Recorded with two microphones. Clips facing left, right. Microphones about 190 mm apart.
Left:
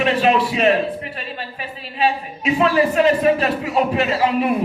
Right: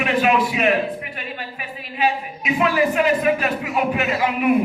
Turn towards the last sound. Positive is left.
turn(degrees=35)  # may be behind; listen again after turning